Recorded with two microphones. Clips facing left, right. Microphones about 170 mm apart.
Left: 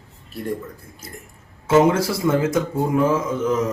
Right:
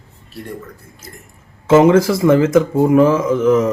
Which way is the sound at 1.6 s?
90° right.